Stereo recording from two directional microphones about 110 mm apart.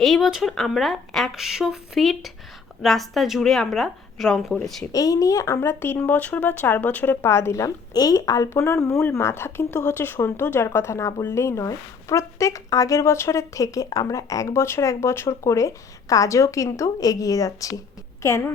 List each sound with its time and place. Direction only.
0.0 s speech: centre (ahead or behind)
4.9 s a woman's voice: 30° left (ahead or behind)